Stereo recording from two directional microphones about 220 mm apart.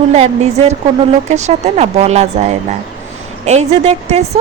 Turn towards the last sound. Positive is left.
turn(degrees=-30)  # may be behind; listen again after turning